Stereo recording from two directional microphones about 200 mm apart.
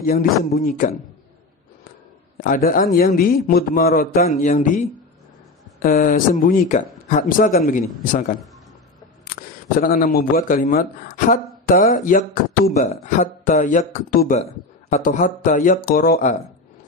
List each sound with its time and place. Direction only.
0.0 s a man's voice: 45° left (ahead or behind)
2.4 s a man's voice: 45° left (ahead or behind)
4.4 s a man's voice: 35° left (ahead or behind)
9.3 s camera: 45° left (ahead or behind)
9.8 s a man's voice: 45° left (ahead or behind)